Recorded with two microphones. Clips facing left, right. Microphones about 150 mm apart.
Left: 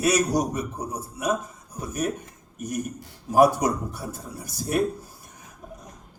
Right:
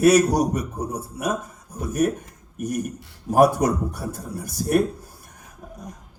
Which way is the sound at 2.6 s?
50° right (ahead or behind).